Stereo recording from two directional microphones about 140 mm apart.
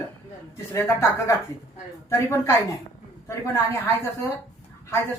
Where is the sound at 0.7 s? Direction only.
20° left (ahead or behind).